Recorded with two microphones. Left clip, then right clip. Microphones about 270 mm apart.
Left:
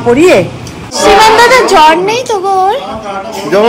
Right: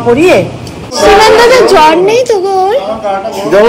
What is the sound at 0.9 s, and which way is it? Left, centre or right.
A woman's voice, centre.